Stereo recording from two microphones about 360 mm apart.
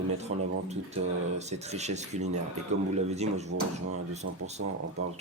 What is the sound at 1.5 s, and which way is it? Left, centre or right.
Speech, centre.